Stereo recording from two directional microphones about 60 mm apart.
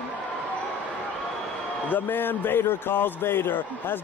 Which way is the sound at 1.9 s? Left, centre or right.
Left.